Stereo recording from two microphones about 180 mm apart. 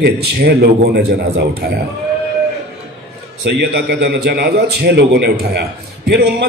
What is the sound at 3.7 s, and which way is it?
A man's voice, 65° right (ahead or behind).